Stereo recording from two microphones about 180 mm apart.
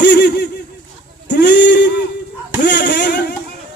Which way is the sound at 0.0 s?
75° left (ahead or behind).